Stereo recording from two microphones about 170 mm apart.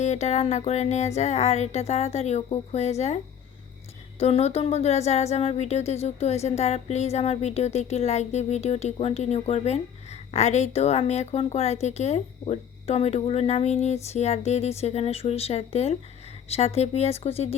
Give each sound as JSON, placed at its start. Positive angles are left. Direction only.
{"t": 0.0, "sound": "speech", "side_deg": 40}
{"t": 4.2, "sound": "speech", "side_deg": 40}